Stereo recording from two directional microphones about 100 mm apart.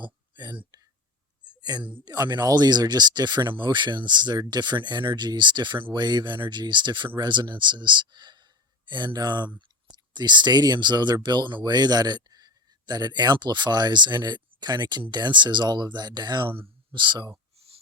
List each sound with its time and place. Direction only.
0.0 s whispering: 50° right (ahead or behind)
1.5 s a sound: 45° right (ahead or behind)
2.0 s speech: 45° right (ahead or behind)